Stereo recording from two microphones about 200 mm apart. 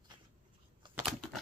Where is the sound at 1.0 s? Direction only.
Centre (ahead or behind).